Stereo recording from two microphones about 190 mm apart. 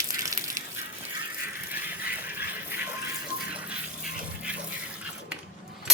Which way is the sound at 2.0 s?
10° right (ahead or behind).